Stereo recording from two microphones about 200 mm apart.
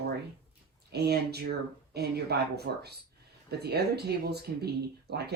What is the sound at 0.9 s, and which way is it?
Speech, 55° right (ahead or behind).